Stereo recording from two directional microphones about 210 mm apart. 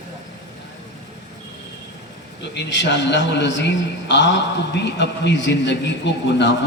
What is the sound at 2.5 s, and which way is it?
A man's voice, 60° left (ahead or behind).